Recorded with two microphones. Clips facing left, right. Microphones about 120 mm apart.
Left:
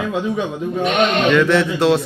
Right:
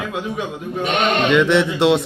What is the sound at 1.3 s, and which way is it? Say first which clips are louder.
Speech: even; 20° right (ahead or behind).